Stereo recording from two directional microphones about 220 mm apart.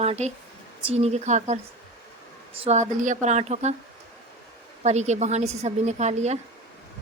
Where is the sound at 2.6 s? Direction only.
30° right (ahead or behind).